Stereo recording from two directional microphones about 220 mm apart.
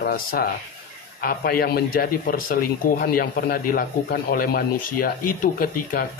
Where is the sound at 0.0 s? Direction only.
40° left (ahead or behind).